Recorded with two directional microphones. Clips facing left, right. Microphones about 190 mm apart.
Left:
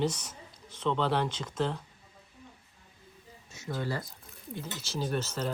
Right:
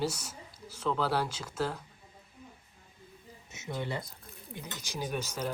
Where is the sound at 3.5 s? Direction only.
20° right (ahead or behind).